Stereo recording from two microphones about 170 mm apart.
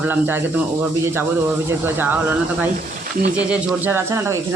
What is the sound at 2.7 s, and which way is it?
Speech, 50° right (ahead or behind).